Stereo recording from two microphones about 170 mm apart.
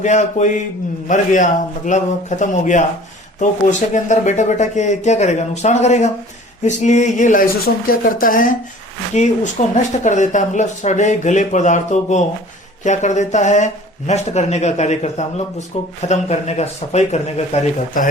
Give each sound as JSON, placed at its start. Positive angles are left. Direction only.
{"t": 0.0, "sound": "speech", "side_deg": 45}